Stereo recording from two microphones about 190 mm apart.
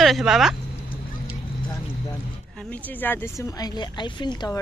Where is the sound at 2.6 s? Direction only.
5° left (ahead or behind).